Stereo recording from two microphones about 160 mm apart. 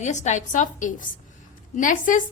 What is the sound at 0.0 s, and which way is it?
A woman's voice, 45° left (ahead or behind).